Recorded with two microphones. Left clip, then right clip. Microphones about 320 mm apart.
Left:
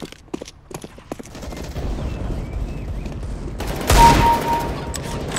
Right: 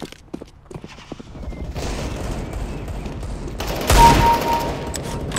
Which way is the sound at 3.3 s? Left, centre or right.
Centre.